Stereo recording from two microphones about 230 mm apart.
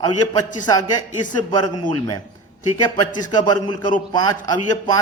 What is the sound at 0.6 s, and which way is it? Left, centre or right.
A man's voice, centre.